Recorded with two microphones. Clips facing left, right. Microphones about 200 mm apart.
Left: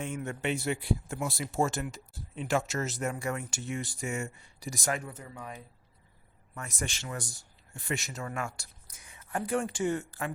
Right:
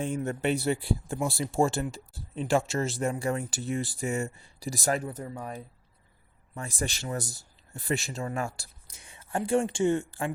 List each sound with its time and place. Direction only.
0.0 s speech: 35° right (ahead or behind)